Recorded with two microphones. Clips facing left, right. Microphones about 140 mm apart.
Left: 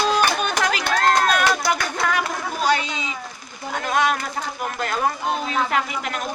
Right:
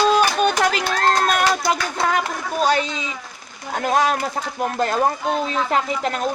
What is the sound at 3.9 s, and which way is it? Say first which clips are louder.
Speech: right 3 dB; 35° right (ahead or behind).